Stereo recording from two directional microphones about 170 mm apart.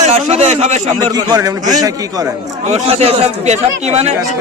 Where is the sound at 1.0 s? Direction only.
20° right (ahead or behind).